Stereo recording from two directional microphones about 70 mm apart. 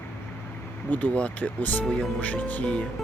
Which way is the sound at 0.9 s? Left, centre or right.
Left.